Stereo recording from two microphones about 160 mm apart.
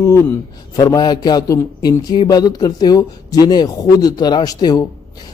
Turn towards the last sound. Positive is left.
turn(degrees=20)  # may be behind; listen again after turning